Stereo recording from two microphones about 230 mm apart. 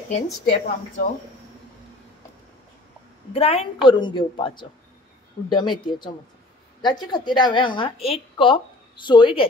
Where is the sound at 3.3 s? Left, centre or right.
Left.